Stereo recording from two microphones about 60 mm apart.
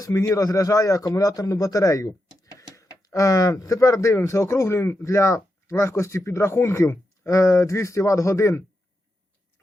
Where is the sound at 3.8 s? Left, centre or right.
Left.